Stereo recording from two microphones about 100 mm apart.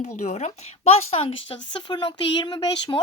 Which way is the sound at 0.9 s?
80° left.